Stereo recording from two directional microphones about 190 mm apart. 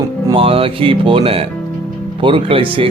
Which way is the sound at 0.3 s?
30° right (ahead or behind).